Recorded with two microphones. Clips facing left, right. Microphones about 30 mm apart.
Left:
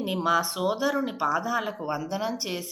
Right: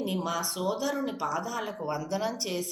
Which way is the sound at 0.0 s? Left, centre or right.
Left.